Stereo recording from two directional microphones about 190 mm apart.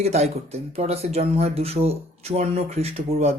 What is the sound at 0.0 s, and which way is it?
Speech, 35° right (ahead or behind).